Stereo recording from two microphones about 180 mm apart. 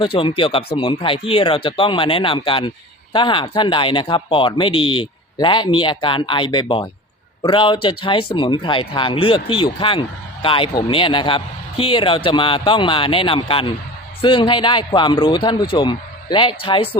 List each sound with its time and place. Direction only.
0.0 s speech: 30° left (ahead or behind)